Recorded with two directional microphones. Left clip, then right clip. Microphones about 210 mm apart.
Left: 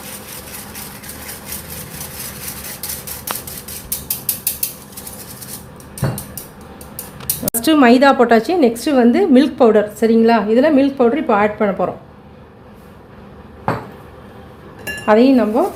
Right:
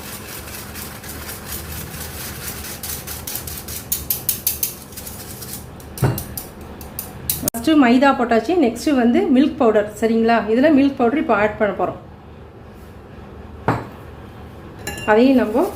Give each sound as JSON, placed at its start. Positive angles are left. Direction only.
{"t": 7.5, "sound": "a woman's voice", "side_deg": 50}
{"t": 15.0, "sound": "a woman's voice", "side_deg": 35}